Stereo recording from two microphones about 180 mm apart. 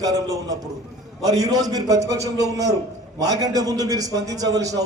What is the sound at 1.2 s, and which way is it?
A man's voice, 20° right (ahead or behind).